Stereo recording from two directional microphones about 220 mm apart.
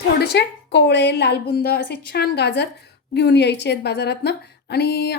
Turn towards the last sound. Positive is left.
turn(degrees=50)  # may be behind; listen again after turning